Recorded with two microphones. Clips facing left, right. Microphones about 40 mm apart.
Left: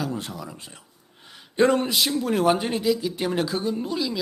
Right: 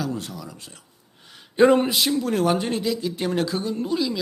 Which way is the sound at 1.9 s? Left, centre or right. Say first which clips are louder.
Right 1 dB; centre.